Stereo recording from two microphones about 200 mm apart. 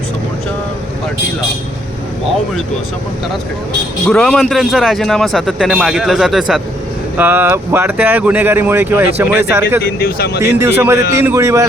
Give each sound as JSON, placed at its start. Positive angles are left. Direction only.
{"t": 4.0, "sound": "speech", "side_deg": 5}
{"t": 9.8, "sound": "speech", "side_deg": 50}
{"t": 10.6, "sound": "speech", "side_deg": -10}